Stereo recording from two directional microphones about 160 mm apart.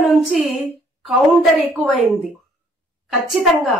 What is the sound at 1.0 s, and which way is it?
Speech, centre (ahead or behind).